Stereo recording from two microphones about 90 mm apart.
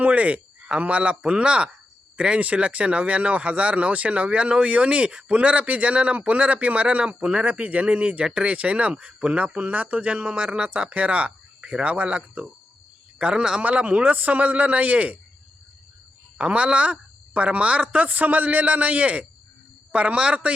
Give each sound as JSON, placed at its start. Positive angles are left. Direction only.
{"t": 0.0, "sound": "speech", "side_deg": -15}
{"t": 16.4, "sound": "speech", "side_deg": -10}